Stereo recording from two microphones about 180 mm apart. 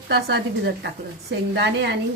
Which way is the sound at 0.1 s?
65° right (ahead or behind).